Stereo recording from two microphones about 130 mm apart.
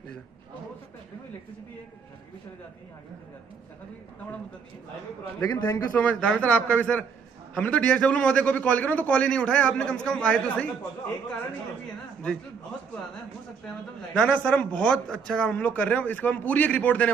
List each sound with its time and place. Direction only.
5.5 s a man's voice: 30° left (ahead or behind)
5.9 s a man's voice: 10° left (ahead or behind)
14.1 s a man's voice: 10° left (ahead or behind)